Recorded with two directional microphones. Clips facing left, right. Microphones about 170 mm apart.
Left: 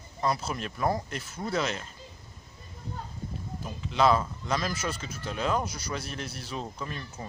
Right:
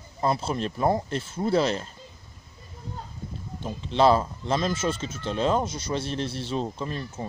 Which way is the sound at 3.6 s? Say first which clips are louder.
Right 4 dB; 30° right (ahead or behind).